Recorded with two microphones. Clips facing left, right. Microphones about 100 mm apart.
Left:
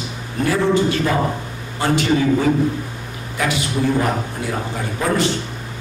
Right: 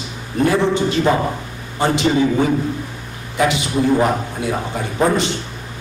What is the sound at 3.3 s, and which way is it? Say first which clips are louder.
A man's voice: right 4 dB; 20° right (ahead or behind).